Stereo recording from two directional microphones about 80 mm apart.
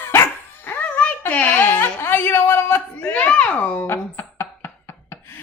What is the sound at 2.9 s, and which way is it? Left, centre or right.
Speech, centre.